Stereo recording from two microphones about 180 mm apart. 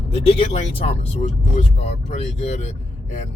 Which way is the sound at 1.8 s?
35° left (ahead or behind).